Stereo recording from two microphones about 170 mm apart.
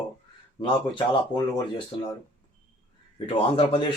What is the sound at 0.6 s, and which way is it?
Speech, 30° left (ahead or behind).